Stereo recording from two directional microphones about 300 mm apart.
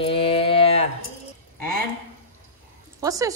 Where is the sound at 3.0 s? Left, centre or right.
Centre.